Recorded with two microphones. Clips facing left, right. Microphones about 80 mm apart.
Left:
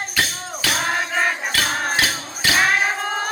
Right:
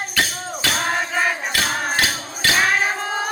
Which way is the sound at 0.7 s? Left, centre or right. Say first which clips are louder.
Left 1 dB; centre.